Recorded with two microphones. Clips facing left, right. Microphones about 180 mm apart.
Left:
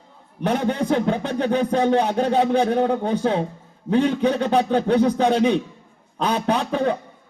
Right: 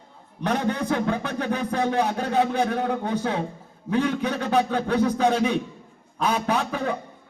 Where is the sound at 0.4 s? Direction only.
25° left (ahead or behind).